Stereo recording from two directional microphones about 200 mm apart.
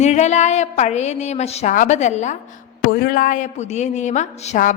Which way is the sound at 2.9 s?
45° left (ahead or behind).